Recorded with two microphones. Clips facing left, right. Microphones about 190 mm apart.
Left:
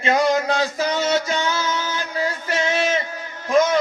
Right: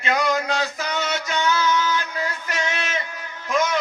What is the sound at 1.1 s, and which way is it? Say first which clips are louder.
Music: left 2 dB; 30° left (ahead or behind).